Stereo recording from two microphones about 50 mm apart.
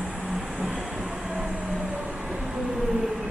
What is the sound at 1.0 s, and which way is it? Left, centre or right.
Train, centre.